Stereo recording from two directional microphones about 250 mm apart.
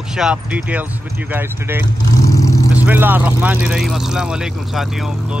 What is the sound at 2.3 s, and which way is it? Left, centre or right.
Vehicle, centre.